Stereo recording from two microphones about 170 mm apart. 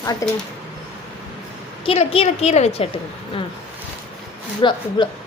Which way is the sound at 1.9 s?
35° left (ahead or behind).